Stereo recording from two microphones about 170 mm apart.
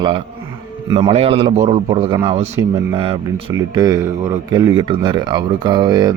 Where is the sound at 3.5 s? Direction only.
20° right (ahead or behind).